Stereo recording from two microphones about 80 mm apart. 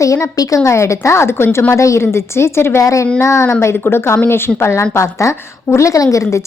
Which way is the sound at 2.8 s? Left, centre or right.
Left.